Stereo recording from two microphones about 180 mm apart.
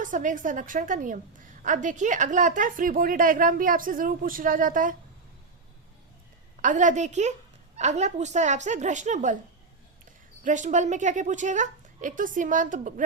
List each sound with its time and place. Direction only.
0.0 s a woman's voice: 45° right (ahead or behind)
6.6 s speech: 45° right (ahead or behind)
10.4 s a woman's voice: 45° right (ahead or behind)